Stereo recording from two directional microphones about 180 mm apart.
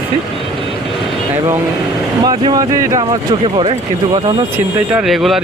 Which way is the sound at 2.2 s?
20° right (ahead or behind).